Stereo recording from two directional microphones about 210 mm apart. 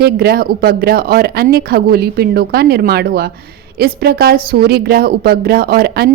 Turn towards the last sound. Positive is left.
turn(degrees=-50)  # may be behind; listen again after turning